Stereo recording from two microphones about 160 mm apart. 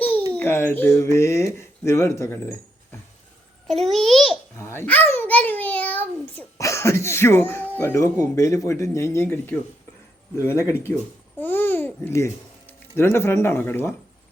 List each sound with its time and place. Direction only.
0.3 s speech: 15° left (ahead or behind)
3.7 s a sound: centre (ahead or behind)
4.5 s babbling: 15° left (ahead or behind)
5.1 s a child's voice: 10° left (ahead or behind)